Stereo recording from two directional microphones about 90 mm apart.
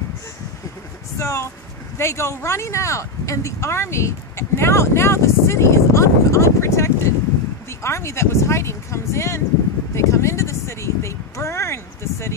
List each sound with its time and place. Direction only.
1.1 s speech: 35° left (ahead or behind)